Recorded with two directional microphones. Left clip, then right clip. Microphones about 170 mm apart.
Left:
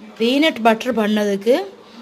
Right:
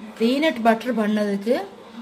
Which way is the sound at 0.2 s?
60° left (ahead or behind).